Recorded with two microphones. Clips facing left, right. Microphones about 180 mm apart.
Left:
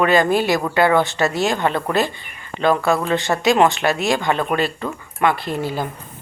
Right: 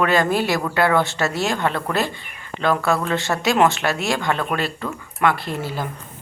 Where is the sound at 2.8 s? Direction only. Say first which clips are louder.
Left 2 dB; 15° left (ahead or behind).